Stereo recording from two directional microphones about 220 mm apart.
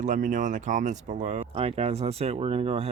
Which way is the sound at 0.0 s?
35° right (ahead or behind).